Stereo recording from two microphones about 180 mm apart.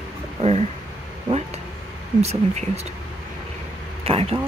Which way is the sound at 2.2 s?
35° right (ahead or behind).